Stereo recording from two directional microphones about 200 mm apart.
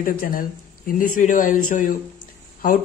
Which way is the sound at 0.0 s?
45° left (ahead or behind).